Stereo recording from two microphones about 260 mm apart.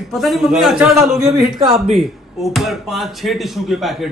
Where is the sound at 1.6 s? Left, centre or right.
Right.